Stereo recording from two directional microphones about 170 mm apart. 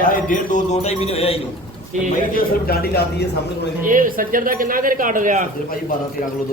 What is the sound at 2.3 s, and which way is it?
Speech, 65° left (ahead or behind).